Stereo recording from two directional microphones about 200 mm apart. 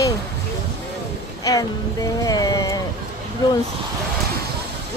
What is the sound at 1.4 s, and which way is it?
Speech, 15° left (ahead or behind).